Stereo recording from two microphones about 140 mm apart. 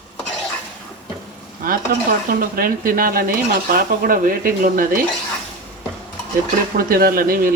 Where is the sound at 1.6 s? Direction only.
90° right.